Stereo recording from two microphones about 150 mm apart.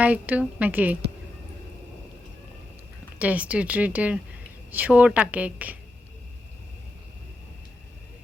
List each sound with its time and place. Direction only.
0.0 s a woman's voice: 10° right (ahead or behind)
3.2 s a woman's voice: 10° right (ahead or behind)